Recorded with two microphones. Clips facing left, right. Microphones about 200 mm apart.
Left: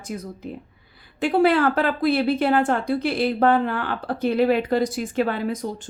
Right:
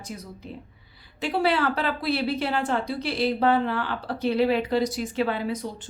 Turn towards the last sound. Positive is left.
turn(degrees=45)  # may be behind; listen again after turning